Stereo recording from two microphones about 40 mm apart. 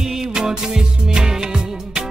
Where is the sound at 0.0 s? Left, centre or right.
Centre.